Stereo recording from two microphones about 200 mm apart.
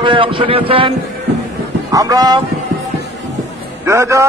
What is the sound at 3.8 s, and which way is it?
Speech, 15° right (ahead or behind).